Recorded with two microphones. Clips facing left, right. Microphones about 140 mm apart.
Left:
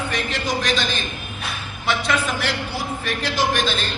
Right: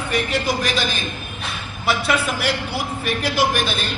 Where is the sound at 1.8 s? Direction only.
10° right (ahead or behind).